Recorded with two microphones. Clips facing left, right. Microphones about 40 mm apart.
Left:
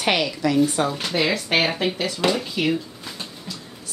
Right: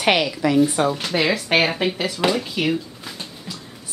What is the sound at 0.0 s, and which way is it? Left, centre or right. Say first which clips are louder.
A woman's voice: right 3 dB; centre.